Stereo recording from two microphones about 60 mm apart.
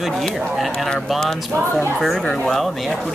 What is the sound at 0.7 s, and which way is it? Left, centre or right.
Speech, centre.